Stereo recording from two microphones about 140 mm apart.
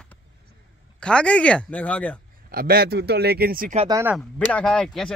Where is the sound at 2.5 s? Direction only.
90° right.